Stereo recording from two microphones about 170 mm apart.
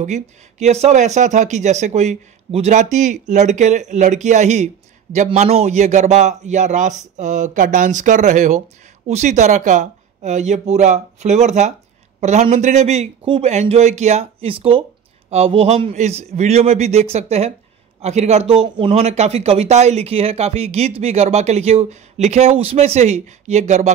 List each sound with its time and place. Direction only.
0.0 s a man's voice: 45° right (ahead or behind)